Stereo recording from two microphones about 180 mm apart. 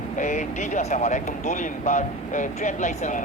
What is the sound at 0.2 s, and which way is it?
Speech, 45° left (ahead or behind).